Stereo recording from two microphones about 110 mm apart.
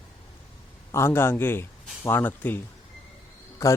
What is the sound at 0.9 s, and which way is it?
A man's voice, 25° left (ahead or behind).